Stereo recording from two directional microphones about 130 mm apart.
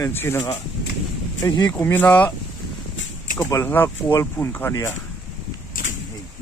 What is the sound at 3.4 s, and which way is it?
Speech, 20° left (ahead or behind).